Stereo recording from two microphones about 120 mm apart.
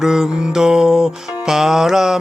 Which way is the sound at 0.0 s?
5° right (ahead or behind).